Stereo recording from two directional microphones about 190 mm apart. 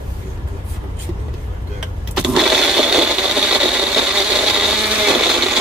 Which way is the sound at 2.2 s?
5° right (ahead or behind).